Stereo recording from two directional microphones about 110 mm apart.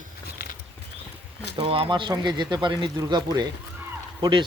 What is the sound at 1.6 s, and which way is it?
Speech, 55° right (ahead or behind).